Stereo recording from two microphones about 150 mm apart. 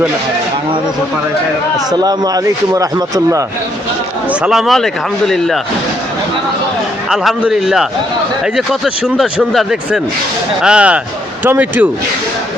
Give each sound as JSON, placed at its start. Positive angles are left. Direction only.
{"t": 1.9, "sound": "a man's voice", "side_deg": -25}
{"t": 4.3, "sound": "speech", "side_deg": -5}
{"t": 7.1, "sound": "speech", "side_deg": -5}